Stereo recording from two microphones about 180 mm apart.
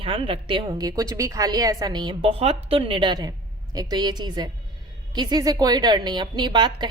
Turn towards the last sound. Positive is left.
turn(degrees=-25)  # may be behind; listen again after turning